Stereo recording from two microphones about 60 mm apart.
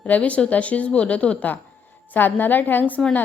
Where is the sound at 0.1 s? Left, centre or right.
Left.